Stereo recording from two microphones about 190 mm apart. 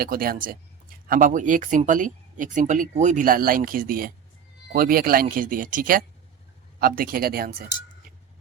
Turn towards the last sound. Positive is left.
turn(degrees=-50)  # may be behind; listen again after turning